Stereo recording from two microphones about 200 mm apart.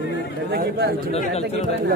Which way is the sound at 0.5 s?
55° right (ahead or behind).